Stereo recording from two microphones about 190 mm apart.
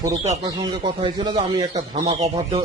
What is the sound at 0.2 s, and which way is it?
Speech, 30° right (ahead or behind).